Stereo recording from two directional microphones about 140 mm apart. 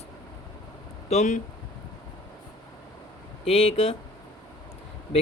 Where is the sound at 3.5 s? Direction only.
45° left (ahead or behind).